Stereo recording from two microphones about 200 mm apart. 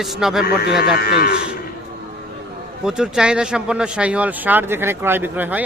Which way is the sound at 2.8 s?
Centre (ahead or behind).